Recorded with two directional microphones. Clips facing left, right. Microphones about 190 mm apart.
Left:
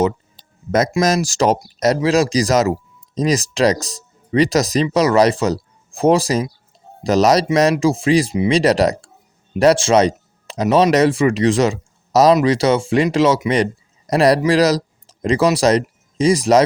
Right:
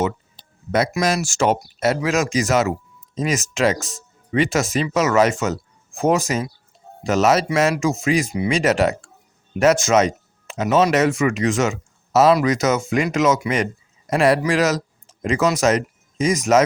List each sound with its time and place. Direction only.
1.0 s speech: 40° left (ahead or behind)